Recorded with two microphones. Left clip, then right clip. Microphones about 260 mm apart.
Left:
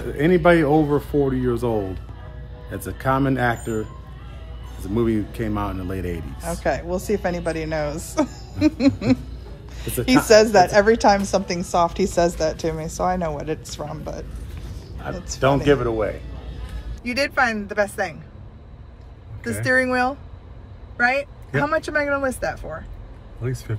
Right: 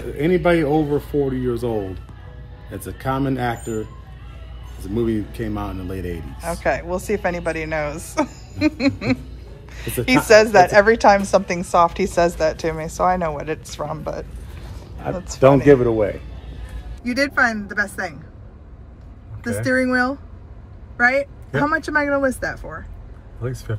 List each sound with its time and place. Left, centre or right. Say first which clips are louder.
0.0 s speech: left 1 dB; centre
4.8 s a woman's voice: even; centre
15.4 s speech: right 6 dB; right
17.0 s speech: right 2 dB; centre
19.4 s speech: even; centre